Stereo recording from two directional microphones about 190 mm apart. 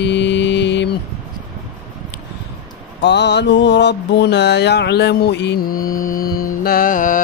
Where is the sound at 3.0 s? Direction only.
65° left (ahead or behind).